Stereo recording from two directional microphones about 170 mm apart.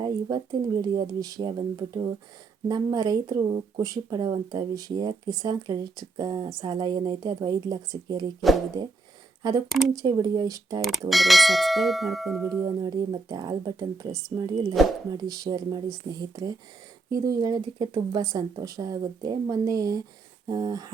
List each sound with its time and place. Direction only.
0.0 s speech: 25° right (ahead or behind)
2.6 s speech: 25° right (ahead or behind)
11.1 s speech: centre (ahead or behind)
12.8 s speech: 25° right (ahead or behind)
14.1 s speech: centre (ahead or behind)
14.3 s speech: 25° right (ahead or behind)
14.7 s speech: centre (ahead or behind)
15.1 s speech: 20° right (ahead or behind)